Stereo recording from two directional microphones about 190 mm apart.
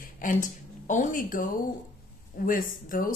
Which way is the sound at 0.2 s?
45° left (ahead or behind).